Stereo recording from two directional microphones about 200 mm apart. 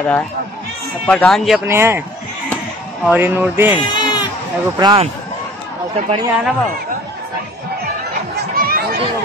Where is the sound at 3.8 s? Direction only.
25° left (ahead or behind).